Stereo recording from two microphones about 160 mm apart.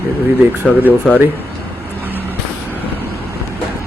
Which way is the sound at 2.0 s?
10° right (ahead or behind).